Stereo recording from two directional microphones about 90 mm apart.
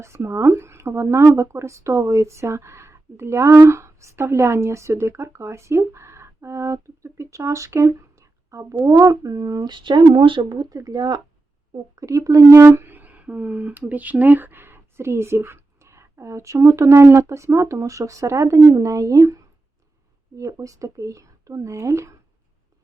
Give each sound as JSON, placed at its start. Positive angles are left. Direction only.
{"t": 0.0, "sound": "speech", "side_deg": -30}
{"t": 9.7, "sound": "speech", "side_deg": -60}
{"t": 10.7, "sound": "speech", "side_deg": -45}
{"t": 11.9, "sound": "speech", "side_deg": -35}